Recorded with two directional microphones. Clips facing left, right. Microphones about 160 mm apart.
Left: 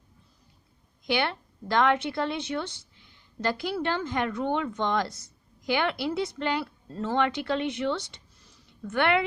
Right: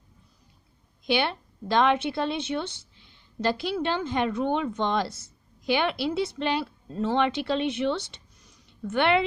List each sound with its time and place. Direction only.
1.0 s a woman's voice: 20° right (ahead or behind)